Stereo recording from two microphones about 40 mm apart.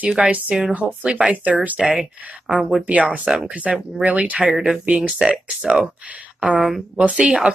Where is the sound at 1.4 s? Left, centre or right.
Right.